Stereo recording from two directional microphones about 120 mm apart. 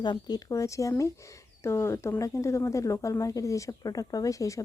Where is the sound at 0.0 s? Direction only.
35° left (ahead or behind).